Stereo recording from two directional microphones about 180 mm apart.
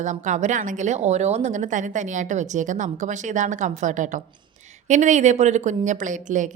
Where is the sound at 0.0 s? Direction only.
40° right (ahead or behind).